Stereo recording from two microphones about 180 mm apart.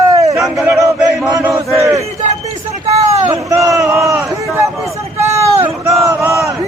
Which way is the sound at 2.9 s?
35° right (ahead or behind).